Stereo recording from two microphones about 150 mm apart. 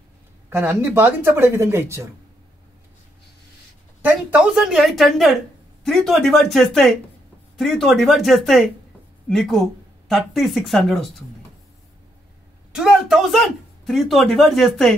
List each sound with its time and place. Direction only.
0.5 s speech: 15° right (ahead or behind)
4.0 s speech: 5° right (ahead or behind)
12.7 s speech: 5° right (ahead or behind)